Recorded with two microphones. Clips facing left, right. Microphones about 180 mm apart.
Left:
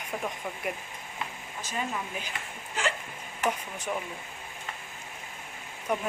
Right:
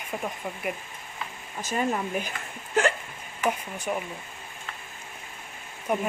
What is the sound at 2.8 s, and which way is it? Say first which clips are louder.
Hiccup: right 8 dB; 50° right (ahead or behind).